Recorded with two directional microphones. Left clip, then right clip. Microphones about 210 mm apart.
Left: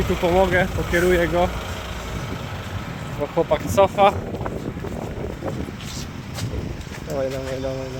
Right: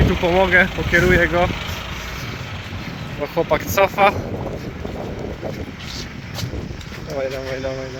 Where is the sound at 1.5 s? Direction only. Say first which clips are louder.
Right 3 dB; 50° left (ahead or behind).